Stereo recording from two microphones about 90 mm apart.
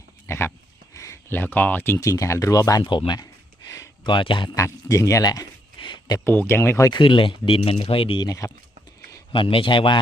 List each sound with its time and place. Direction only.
0.3 s speech: 30° left (ahead or behind)
2.0 s speech: 35° left (ahead or behind)
2.8 s speech: 55° left (ahead or behind)
4.0 s speech: 65° left (ahead or behind)
4.4 s speech: 35° left (ahead or behind); by 6.1 s 55° left (ahead or behind)
6.1 s speech: 25° left (ahead or behind)
6.9 s speech: 70° left (ahead or behind); by 8.2 s 90° left
8.2 s speech: 40° left (ahead or behind)
9.3 s a man's voice: 80° left